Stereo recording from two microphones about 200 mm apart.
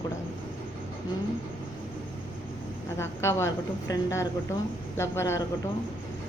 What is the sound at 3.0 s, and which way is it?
A woman's voice, 15° left (ahead or behind).